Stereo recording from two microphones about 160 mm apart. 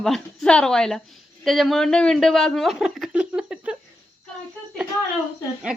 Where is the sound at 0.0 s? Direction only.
5° left (ahead or behind).